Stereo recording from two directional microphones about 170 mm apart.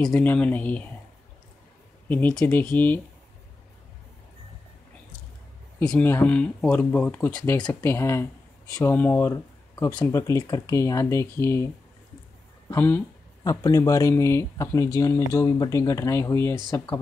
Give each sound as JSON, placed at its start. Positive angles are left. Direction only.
{"t": 0.0, "sound": "speech", "side_deg": 10}
{"t": 2.0, "sound": "speech", "side_deg": 10}
{"t": 5.8, "sound": "speech", "side_deg": 10}